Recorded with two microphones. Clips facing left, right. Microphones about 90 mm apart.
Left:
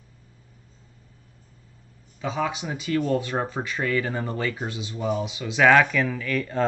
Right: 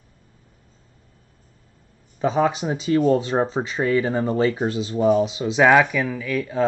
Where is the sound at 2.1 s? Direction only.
40° right (ahead or behind).